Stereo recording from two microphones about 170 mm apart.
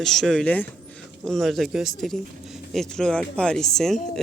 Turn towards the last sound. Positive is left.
turn(degrees=0)  # may be behind; listen again after turning